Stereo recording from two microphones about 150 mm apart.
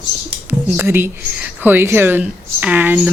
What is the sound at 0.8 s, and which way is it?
Speech, 15° right (ahead or behind).